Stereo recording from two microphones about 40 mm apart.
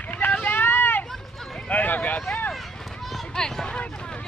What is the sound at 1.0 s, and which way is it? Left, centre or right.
Run, centre.